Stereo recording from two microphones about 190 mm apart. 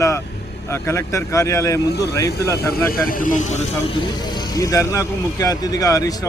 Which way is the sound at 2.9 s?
45° left (ahead or behind).